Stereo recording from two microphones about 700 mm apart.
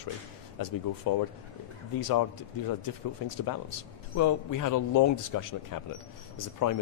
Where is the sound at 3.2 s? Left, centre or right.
Left.